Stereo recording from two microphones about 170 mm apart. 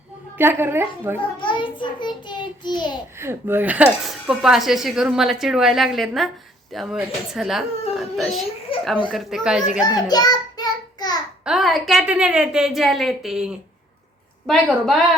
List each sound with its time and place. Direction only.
0.3 s a woman's voice: 15° right (ahead or behind)
1.4 s child singing: 30° left (ahead or behind)
3.2 s speech: 15° right (ahead or behind)
9.8 s child singing: 25° left (ahead or behind)
11.4 s speech: centre (ahead or behind)